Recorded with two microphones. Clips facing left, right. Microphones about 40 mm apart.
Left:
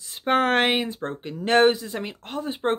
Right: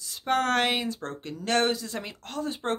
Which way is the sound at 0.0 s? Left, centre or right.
Left.